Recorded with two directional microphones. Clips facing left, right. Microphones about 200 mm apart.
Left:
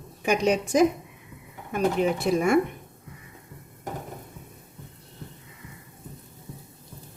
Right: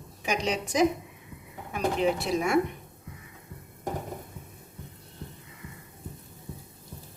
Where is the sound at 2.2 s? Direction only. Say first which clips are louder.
Left 5 dB; 50° left (ahead or behind).